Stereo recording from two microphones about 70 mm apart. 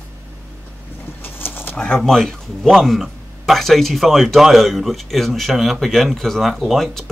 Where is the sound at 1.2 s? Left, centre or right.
Left.